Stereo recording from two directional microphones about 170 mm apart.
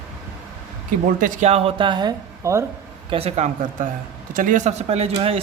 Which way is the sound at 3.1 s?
35° right (ahead or behind).